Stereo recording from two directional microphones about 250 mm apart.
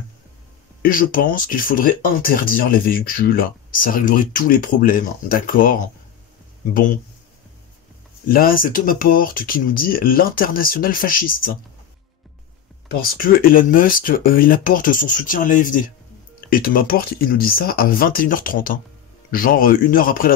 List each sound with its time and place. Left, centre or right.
0.8 s speech: left
8.3 s speech: left
12.8 s speech: left